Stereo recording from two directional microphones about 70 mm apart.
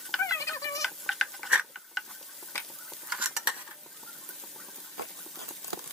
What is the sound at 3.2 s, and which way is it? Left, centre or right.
Stir, centre.